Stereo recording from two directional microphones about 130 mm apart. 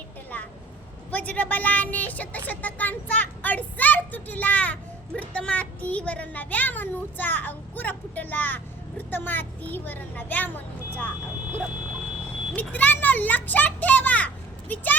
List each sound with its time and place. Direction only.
0.3 s a sound: 15° left (ahead or behind)
1.1 s speech: 10° left (ahead or behind)
12.5 s speech: 15° left (ahead or behind)